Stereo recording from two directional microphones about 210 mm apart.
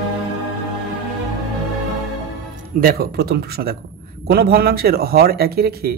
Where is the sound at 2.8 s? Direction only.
45° right (ahead or behind).